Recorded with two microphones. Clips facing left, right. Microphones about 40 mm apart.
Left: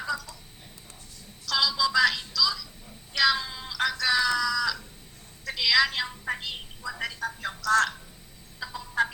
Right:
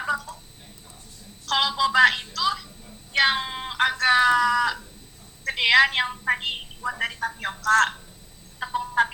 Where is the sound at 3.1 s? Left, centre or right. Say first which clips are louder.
Right 3 dB; right.